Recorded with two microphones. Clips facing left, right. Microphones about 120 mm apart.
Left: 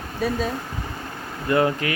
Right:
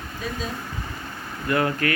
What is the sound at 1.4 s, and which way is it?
Speech, 20° left (ahead or behind).